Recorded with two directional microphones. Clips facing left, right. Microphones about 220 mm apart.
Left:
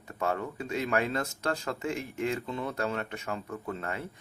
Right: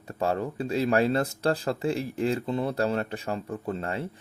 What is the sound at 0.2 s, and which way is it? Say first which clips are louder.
Speech: right 4 dB; 30° right (ahead or behind).